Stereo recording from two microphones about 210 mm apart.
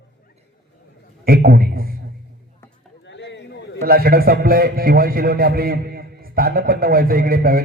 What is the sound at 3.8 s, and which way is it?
A man's voice, 45° right (ahead or behind).